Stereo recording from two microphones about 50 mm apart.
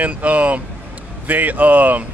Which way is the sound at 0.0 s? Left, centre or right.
Right.